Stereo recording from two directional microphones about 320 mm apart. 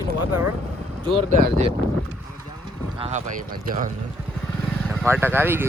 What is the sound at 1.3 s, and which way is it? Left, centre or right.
Speech, right.